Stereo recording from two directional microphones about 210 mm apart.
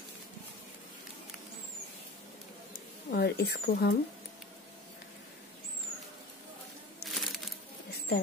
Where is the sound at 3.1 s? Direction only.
50° left (ahead or behind).